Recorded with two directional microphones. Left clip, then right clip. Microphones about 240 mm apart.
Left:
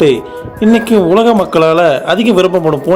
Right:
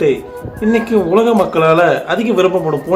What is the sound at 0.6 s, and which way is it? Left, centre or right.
Speech, left.